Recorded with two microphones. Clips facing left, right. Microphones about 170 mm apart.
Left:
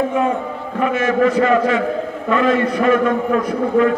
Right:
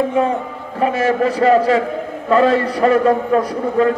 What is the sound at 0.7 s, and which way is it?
A man's voice, 35° right (ahead or behind).